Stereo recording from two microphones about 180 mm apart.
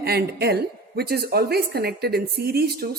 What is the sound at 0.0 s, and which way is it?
A woman's voice, 60° right (ahead or behind).